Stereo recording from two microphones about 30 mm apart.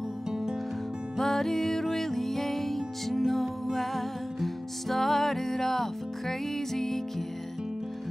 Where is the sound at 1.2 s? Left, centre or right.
Centre.